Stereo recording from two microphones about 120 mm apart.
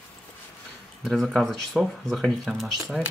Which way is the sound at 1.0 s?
Centre (ahead or behind).